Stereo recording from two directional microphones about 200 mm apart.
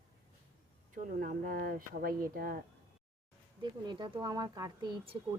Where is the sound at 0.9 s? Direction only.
40° right (ahead or behind).